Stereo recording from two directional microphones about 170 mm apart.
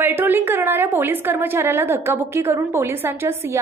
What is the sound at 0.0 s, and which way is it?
A woman's voice, 10° right (ahead or behind).